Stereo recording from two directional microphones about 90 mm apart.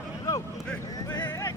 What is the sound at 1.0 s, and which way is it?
Vehicle, 50° left (ahead or behind).